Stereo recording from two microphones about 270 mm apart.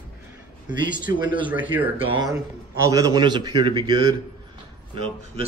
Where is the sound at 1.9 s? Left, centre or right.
Centre.